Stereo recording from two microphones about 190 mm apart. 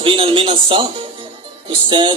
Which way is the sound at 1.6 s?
25° right (ahead or behind).